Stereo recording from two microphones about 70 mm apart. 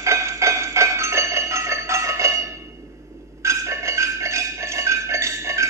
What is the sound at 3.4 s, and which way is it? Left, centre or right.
Music, right.